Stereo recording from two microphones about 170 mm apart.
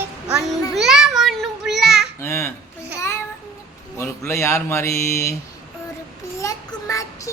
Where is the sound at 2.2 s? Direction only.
15° left (ahead or behind).